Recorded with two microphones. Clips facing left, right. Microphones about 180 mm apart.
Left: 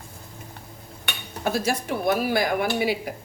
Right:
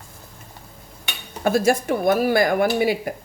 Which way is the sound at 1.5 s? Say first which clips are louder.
Right 7 dB; 50° right (ahead or behind).